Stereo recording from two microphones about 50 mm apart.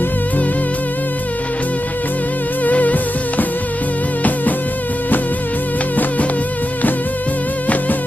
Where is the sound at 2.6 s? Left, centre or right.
Left.